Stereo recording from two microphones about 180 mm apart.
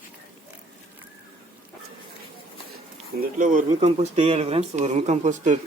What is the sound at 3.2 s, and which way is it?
Speech, 45° right (ahead or behind).